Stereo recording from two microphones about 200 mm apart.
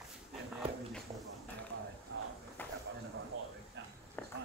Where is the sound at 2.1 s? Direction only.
60° right (ahead or behind).